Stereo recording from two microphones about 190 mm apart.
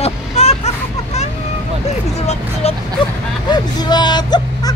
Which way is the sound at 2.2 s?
35° left (ahead or behind).